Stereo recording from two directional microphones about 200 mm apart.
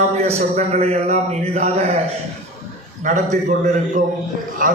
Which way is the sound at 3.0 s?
35° right (ahead or behind).